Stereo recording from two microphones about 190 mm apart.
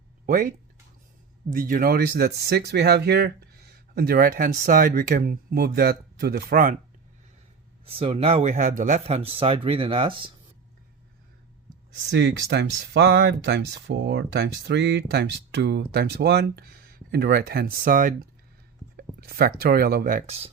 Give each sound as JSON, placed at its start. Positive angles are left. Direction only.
{"t": 0.3, "sound": "speech", "side_deg": -45}
{"t": 7.9, "sound": "speech", "side_deg": -30}
{"t": 12.1, "sound": "speech", "side_deg": -65}
{"t": 20.2, "sound": "speech", "side_deg": -30}